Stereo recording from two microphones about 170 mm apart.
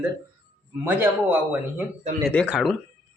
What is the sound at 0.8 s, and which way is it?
Speech, 10° right (ahead or behind).